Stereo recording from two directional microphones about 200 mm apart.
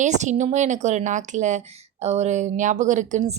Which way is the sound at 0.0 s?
35° right (ahead or behind).